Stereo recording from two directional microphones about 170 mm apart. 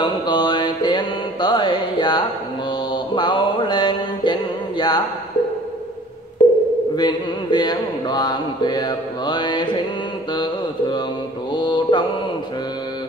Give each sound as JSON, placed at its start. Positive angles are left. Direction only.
{"t": 0.0, "sound": "music", "side_deg": 25}
{"t": 2.9, "sound": "mantra", "side_deg": 30}
{"t": 7.0, "sound": "speech", "side_deg": 25}
{"t": 10.3, "sound": "mantra", "side_deg": 25}